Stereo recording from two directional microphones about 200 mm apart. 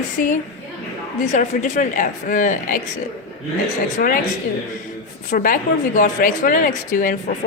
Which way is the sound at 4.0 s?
45° left (ahead or behind).